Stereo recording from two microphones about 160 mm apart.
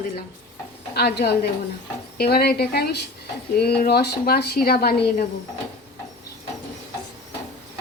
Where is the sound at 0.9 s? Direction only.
85° left.